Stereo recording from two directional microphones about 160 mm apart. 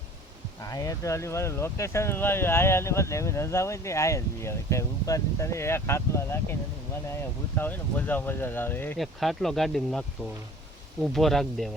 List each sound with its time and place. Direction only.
0.6 s speech: 20° left (ahead or behind)
9.0 s speech: centre (ahead or behind)